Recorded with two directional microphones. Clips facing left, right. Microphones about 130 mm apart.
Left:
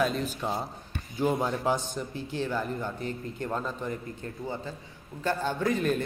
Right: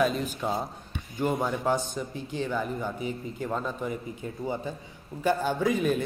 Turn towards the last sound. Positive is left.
turn(degrees=0)  # may be behind; listen again after turning